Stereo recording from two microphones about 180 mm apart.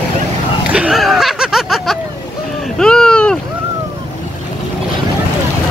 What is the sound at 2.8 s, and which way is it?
Speech, 5° left (ahead or behind).